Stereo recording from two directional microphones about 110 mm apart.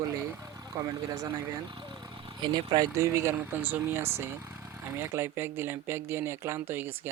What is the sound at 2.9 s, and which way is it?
Speech, 30° right (ahead or behind).